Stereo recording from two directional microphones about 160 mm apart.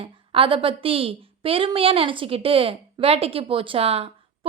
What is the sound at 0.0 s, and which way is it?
A woman's voice, 35° right (ahead or behind).